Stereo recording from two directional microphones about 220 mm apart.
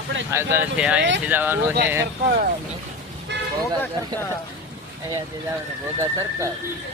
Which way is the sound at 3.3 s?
50° right (ahead or behind).